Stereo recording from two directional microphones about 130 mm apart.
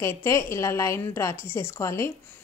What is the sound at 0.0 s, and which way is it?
Speech, 20° left (ahead or behind).